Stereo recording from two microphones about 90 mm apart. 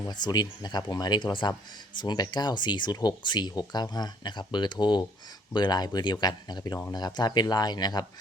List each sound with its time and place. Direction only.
0.1 s speech: 50° left (ahead or behind)
2.0 s speech: 50° left (ahead or behind)